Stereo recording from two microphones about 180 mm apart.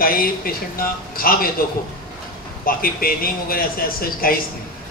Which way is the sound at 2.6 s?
55° left (ahead or behind).